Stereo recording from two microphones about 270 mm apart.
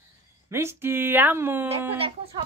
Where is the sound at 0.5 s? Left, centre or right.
Centre.